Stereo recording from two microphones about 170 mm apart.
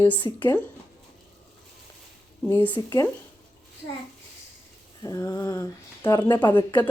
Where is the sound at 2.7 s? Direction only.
25° left (ahead or behind).